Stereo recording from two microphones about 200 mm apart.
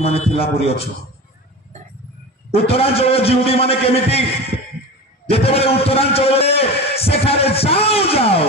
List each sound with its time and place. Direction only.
0.0 s a man's voice: 30° left (ahead or behind)
2.5 s a man's voice: 30° left (ahead or behind)
5.3 s a man's voice: 30° left (ahead or behind)